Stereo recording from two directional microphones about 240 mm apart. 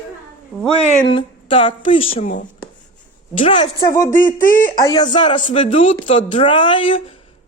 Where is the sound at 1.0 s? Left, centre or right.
Left.